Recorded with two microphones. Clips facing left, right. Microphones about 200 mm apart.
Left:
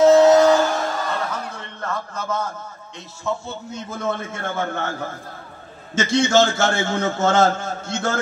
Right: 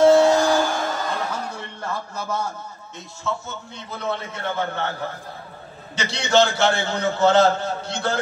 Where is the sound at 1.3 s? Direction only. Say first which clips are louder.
Even; 10° right (ahead or behind).